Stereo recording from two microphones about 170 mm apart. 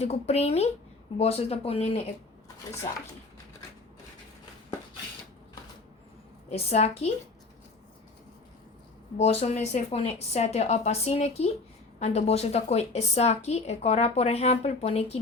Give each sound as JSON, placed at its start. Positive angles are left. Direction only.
{"t": 0.0, "sound": "a woman's voice", "side_deg": 40}
{"t": 6.5, "sound": "a woman's voice", "side_deg": 40}
{"t": 9.1, "sound": "a woman's voice", "side_deg": 40}